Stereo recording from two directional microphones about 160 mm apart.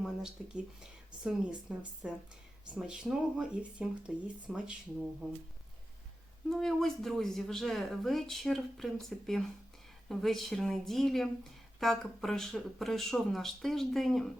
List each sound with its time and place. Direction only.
0.0 s speech: 5° right (ahead or behind)
6.5 s speech: centre (ahead or behind)